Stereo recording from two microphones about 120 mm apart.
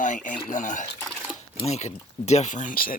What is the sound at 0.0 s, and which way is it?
Speech, 90° left.